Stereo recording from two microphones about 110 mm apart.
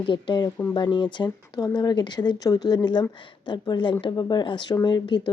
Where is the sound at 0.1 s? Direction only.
40° left (ahead or behind).